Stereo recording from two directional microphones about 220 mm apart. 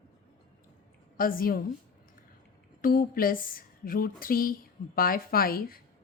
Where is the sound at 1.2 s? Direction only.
40° left (ahead or behind).